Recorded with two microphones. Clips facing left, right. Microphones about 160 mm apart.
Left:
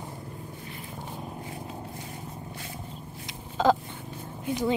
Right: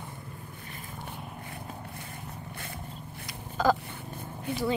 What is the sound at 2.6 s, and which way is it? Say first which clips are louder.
Vehicle: left 1 dB; 60° right (ahead or behind).